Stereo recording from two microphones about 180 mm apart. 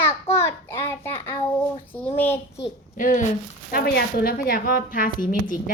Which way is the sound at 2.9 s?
50° left (ahead or behind).